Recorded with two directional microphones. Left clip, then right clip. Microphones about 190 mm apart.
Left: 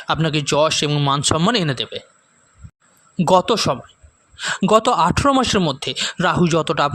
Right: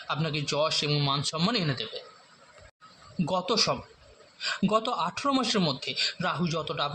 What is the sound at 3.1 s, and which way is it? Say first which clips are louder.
Speech: left 12 dB; 55° left (ahead or behind).